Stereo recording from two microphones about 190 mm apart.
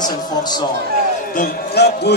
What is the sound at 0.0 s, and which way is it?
Speech, 20° left (ahead or behind).